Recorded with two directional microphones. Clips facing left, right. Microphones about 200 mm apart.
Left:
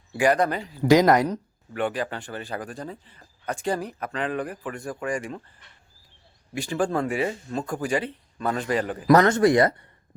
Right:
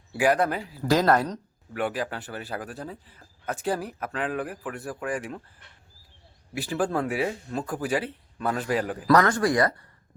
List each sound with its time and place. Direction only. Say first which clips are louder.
0.1 s speech: left 1 dB; 5° right (ahead or behind)
0.8 s speech: left 5 dB; 15° left (ahead or behind)
1.7 s speech: left 2 dB; 5° right (ahead or behind)
6.5 s speech: left 1 dB; 5° right (ahead or behind)
9.0 s speech: left 4 dB; 25° left (ahead or behind)